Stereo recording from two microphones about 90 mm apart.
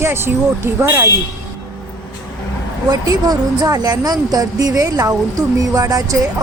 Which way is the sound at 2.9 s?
50° right (ahead or behind).